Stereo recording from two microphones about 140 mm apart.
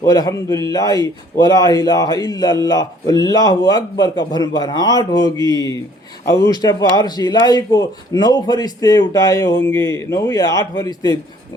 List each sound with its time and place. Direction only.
0.0 s a man's voice: 25° left (ahead or behind)